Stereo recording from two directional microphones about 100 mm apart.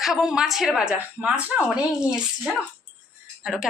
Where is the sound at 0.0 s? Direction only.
5° right (ahead or behind).